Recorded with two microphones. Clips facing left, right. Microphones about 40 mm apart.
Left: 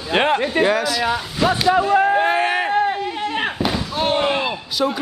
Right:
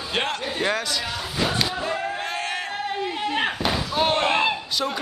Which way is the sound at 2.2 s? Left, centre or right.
Left.